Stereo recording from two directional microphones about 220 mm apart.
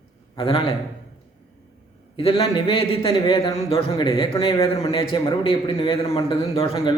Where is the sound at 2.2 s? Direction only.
25° left (ahead or behind).